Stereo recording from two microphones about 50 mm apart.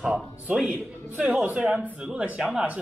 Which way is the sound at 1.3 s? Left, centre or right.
Right.